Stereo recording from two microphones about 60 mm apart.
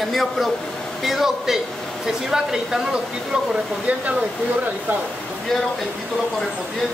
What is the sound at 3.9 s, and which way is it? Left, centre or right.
Speech, right.